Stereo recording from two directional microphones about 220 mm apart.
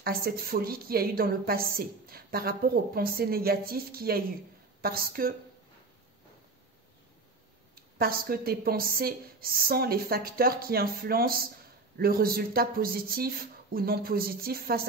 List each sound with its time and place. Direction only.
0.0 s a woman's voice: 45° right (ahead or behind)
7.7 s a woman's voice: 40° right (ahead or behind)